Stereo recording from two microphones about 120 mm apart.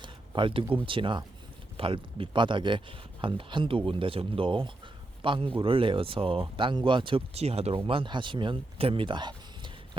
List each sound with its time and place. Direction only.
0.0 s a sound: 45° right (ahead or behind)
0.9 s speech: 45° right (ahead or behind); by 7.8 s 60° right (ahead or behind)
7.9 s speech: 45° right (ahead or behind)